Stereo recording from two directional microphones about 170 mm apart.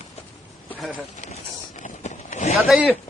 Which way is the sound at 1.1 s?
45° left (ahead or behind).